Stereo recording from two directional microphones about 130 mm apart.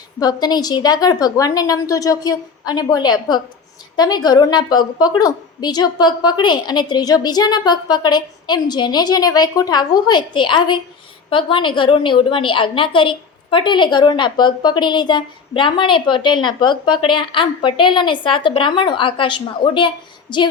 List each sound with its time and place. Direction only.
0.2 s a woman's voice: 30° left (ahead or behind)